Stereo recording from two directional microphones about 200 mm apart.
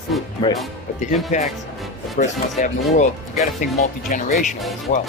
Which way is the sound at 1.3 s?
35° left (ahead or behind).